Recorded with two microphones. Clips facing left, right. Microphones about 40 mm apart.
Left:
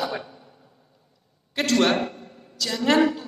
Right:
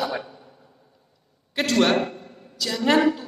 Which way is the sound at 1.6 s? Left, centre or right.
Centre.